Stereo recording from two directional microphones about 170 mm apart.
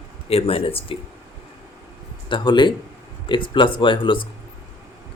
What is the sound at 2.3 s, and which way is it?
Speech, 25° left (ahead or behind).